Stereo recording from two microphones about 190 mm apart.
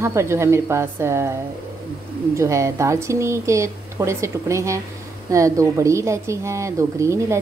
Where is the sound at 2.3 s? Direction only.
15° right (ahead or behind).